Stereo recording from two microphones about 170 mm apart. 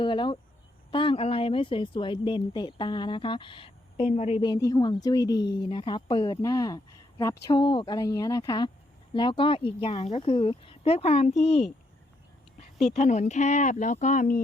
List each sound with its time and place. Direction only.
0.0 s speech: 30° left (ahead or behind); by 14.4 s 50° left (ahead or behind)